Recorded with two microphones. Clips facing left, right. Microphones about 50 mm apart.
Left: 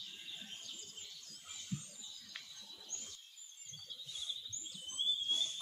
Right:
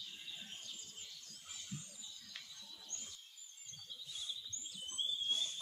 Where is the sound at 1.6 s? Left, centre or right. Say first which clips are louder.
Left 5 dB; centre.